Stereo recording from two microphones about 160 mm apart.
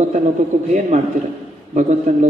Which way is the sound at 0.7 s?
45° right (ahead or behind).